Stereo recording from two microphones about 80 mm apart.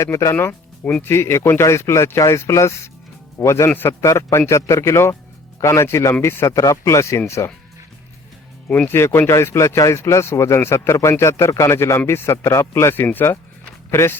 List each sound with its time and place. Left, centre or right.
0.0 s speech: left
0.3 s speech: left
8.9 s speech: left